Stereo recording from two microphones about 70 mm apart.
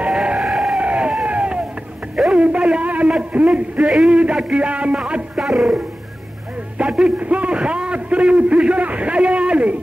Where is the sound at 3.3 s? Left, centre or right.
Centre.